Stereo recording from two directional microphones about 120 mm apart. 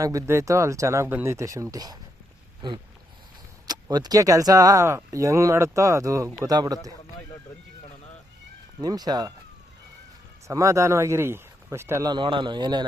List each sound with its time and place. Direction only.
0.0 s a man's voice: 30° right (ahead or behind)
8.8 s a man's voice: 35° right (ahead or behind)
10.5 s speech: 25° right (ahead or behind)
12.0 s a man's voice: 40° right (ahead or behind)